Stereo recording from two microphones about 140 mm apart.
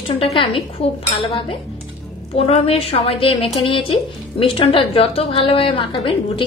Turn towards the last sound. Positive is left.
turn(degrees=35)  # may be behind; listen again after turning